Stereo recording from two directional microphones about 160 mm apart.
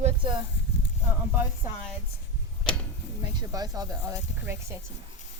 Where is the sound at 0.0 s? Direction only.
30° right (ahead or behind).